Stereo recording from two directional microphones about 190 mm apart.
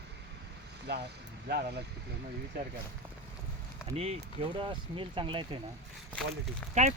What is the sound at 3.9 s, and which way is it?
Speech, 30° right (ahead or behind).